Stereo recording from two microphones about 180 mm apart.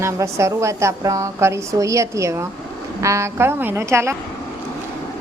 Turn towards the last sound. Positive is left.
turn(degrees=-15)  # may be behind; listen again after turning